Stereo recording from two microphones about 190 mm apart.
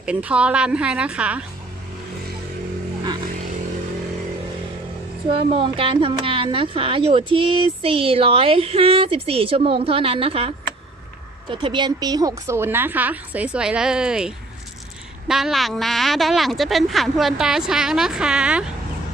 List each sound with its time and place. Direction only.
0.0 s a woman's voice: 5° right (ahead or behind)
5.3 s a woman's voice: 30° right (ahead or behind)
11.5 s a woman's voice: 25° right (ahead or behind); by 18.6 s 5° right (ahead or behind)